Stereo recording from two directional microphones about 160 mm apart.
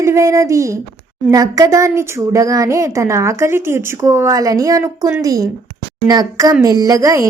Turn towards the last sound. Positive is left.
turn(degrees=-20)  # may be behind; listen again after turning